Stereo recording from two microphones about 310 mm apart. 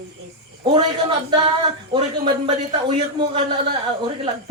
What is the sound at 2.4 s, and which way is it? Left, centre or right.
A man's voice, centre.